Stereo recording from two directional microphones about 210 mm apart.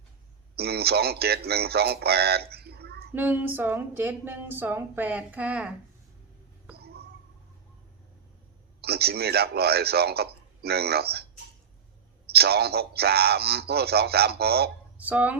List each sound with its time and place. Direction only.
0.5 s speech: 50° right (ahead or behind)
3.2 s speech: 10° right (ahead or behind)
6.7 s a sound: 50° right (ahead or behind)
8.8 s a man's voice: 50° right (ahead or behind)
14.9 s speech: 5° right (ahead or behind)